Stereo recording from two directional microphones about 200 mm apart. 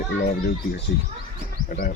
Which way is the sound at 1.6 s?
45° left (ahead or behind).